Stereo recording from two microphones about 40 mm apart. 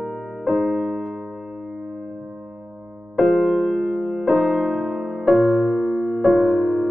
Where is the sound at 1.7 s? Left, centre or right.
Centre.